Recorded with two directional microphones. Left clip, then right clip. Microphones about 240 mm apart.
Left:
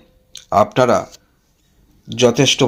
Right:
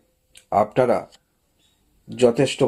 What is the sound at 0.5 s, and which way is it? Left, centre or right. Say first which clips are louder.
Speech: left 5 dB; left.